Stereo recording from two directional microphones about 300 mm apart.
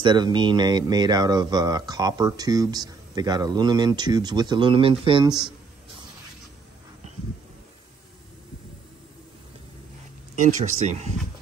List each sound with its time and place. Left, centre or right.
0.0 s speech: centre
10.3 s speech: right